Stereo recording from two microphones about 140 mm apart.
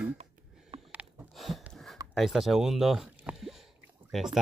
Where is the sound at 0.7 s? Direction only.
35° right (ahead or behind).